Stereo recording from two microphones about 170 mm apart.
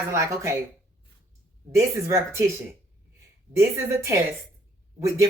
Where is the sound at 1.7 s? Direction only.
15° right (ahead or behind).